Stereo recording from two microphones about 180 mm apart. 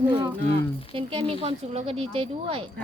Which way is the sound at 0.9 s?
30° right (ahead or behind).